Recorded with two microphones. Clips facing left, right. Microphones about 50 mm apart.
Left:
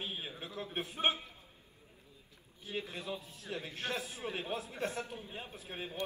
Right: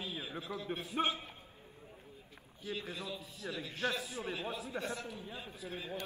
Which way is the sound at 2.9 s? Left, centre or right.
Left.